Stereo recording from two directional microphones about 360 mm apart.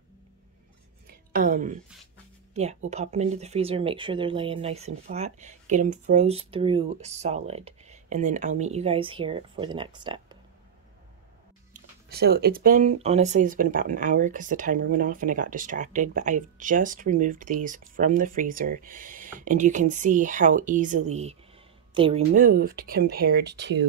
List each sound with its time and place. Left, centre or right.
1.3 s a woman's voice: right
11.7 s speech: right